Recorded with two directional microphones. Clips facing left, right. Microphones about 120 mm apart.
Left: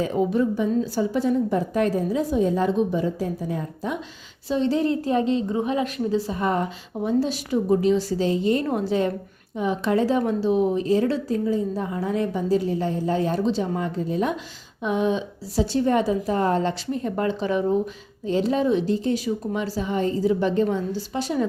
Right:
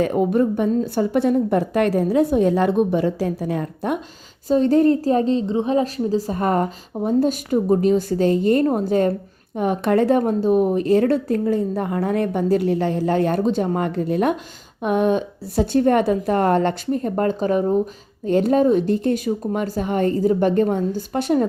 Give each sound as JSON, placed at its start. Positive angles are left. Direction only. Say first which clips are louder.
{"t": 0.0, "sound": "a woman's voice", "louder": "right 4 dB", "side_deg": -55}
{"t": 4.4, "sound": "a woman's voice", "louder": "right 6 dB", "side_deg": -45}
{"t": 18.3, "sound": "a woman's voice", "louder": "right 5 dB", "side_deg": -55}